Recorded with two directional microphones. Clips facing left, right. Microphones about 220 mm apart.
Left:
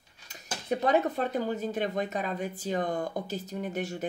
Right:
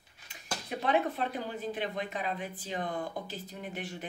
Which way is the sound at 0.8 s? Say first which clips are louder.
Left 3 dB; 40° left (ahead or behind).